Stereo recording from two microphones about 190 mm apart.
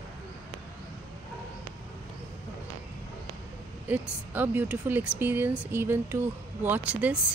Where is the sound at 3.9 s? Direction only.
10° right (ahead or behind).